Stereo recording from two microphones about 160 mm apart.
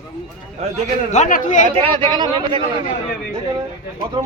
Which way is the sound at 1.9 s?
30° right (ahead or behind).